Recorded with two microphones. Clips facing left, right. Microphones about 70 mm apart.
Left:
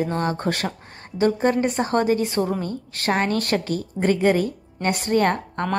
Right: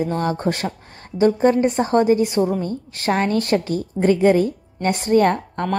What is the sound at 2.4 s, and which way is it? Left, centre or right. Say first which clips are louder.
Speech: right 4 dB; centre.